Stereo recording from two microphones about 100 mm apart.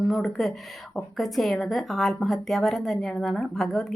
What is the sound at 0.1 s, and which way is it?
A woman's voice, 5° left (ahead or behind).